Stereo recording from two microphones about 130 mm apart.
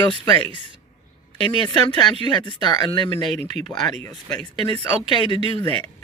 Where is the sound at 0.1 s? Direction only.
40° left (ahead or behind).